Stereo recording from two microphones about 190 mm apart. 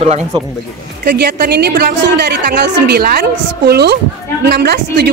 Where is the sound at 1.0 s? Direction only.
60° right (ahead or behind).